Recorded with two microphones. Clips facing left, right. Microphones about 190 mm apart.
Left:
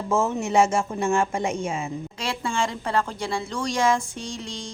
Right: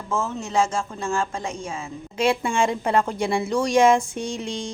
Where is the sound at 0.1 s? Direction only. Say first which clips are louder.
Left 3 dB; 25° left (ahead or behind).